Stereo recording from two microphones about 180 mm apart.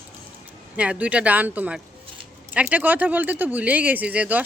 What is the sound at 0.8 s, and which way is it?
Speech, 5° right (ahead or behind).